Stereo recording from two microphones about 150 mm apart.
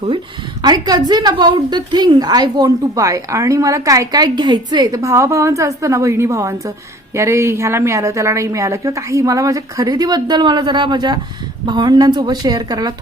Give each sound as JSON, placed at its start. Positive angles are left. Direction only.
{"t": 0.6, "sound": "a woman's voice", "side_deg": -30}